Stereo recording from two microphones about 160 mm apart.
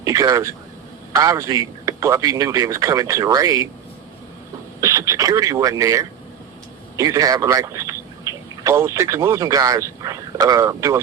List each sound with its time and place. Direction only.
0.0 s a man's voice: 20° right (ahead or behind)
4.8 s a man's voice: 20° right (ahead or behind)